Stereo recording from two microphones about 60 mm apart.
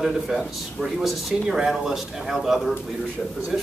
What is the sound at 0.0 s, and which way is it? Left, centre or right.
Speech, centre.